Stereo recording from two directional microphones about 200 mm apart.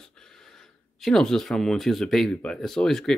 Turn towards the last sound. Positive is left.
turn(degrees=5)  # may be behind; listen again after turning